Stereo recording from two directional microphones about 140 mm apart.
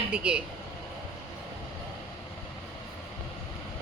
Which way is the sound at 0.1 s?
5° right (ahead or behind).